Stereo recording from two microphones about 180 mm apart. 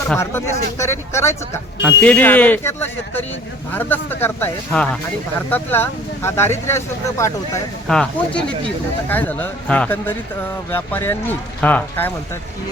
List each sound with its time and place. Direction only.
0.1 s speech: 10° left (ahead or behind)
7.9 s speech: 5° left (ahead or behind)